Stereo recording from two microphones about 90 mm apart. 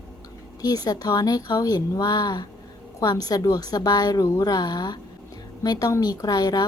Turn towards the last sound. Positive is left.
turn(degrees=45)  # may be behind; listen again after turning